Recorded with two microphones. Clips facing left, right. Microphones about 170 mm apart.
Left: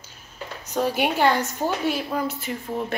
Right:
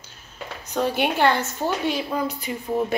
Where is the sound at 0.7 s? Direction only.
10° left (ahead or behind).